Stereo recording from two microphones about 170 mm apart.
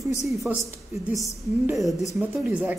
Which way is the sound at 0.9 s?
Centre (ahead or behind).